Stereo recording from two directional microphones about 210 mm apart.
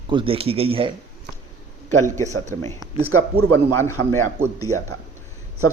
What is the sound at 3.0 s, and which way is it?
Speech, 90° right.